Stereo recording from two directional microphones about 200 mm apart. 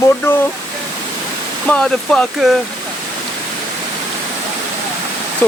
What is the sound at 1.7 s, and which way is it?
Speech, 5° left (ahead or behind).